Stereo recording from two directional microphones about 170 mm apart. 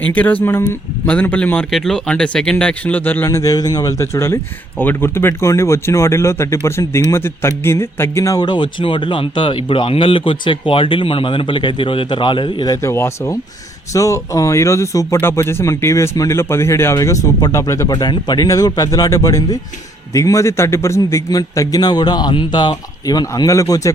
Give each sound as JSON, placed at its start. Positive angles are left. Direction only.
{"t": 0.1, "sound": "speech", "side_deg": 10}